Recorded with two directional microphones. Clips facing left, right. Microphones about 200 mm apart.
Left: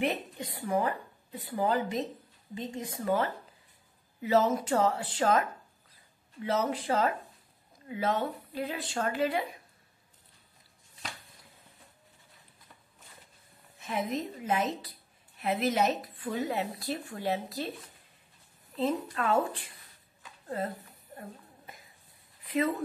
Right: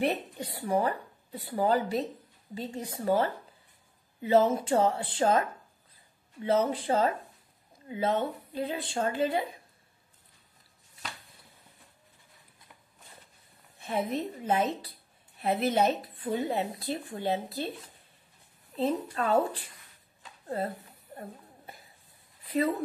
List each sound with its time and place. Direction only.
0.0 s a woman's voice: 35° right (ahead or behind)
13.7 s a woman's voice: 30° right (ahead or behind)
18.8 s a woman's voice: 35° right (ahead or behind)
21.2 s a sound: 35° right (ahead or behind)